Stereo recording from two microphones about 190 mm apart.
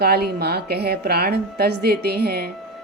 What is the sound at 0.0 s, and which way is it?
A woman's voice, 55° right (ahead or behind).